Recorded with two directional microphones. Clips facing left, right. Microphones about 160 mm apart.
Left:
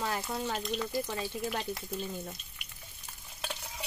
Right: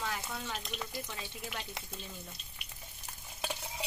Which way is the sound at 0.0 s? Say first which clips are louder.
Left 5 dB; 40° left (ahead or behind).